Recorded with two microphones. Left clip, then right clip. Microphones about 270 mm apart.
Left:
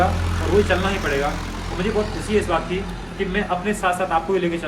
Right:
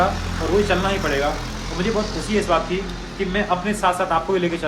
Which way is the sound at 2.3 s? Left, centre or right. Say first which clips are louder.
Right 1 dB; centre.